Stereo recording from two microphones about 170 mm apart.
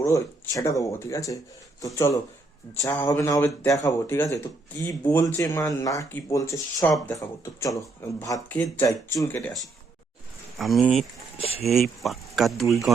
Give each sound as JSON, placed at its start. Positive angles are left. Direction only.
{"t": 0.0, "sound": "speech", "side_deg": 15}
{"t": 2.8, "sound": "speech", "side_deg": 20}
{"t": 10.6, "sound": "speech", "side_deg": 0}